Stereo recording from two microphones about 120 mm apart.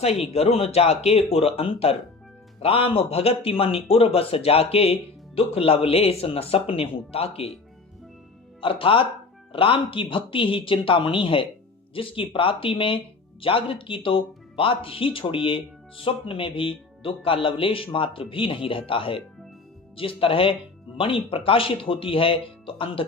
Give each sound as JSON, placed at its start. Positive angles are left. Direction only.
{"t": 0.0, "sound": "speech", "side_deg": 60}
{"t": 8.6, "sound": "speech", "side_deg": 50}